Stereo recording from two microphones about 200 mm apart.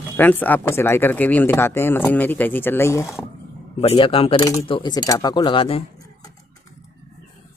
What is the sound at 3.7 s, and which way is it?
Speech, 25° left (ahead or behind).